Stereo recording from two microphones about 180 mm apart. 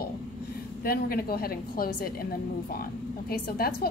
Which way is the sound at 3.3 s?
55° left (ahead or behind).